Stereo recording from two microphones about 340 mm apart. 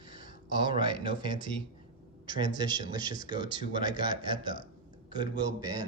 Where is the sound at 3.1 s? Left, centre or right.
Left.